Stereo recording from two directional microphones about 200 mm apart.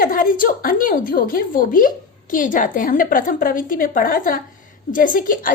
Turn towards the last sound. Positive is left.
turn(degrees=45)  # may be behind; listen again after turning